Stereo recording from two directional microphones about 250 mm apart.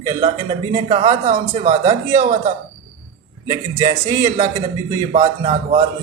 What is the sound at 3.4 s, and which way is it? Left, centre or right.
Speech, right.